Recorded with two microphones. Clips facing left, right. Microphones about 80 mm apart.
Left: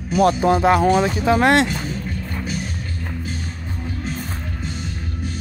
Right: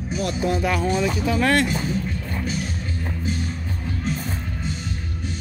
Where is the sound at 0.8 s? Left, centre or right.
Left.